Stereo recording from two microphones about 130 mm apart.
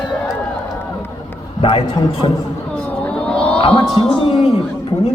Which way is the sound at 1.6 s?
45° left (ahead or behind).